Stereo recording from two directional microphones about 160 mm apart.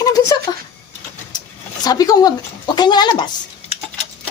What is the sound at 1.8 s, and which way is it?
Speech, 25° left (ahead or behind).